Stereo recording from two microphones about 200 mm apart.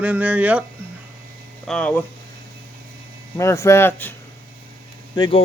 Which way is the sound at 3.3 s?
15° left (ahead or behind).